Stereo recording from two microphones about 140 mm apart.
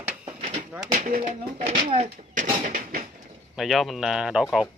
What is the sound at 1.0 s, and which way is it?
Speech, 85° right.